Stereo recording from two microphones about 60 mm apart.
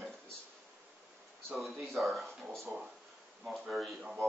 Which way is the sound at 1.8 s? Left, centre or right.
Centre.